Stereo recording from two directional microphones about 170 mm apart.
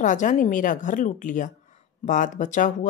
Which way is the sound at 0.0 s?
45° left (ahead or behind).